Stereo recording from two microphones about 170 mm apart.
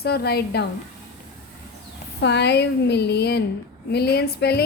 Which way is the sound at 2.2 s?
90° left.